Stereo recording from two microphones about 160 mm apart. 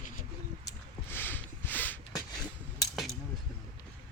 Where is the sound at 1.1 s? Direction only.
10° left (ahead or behind).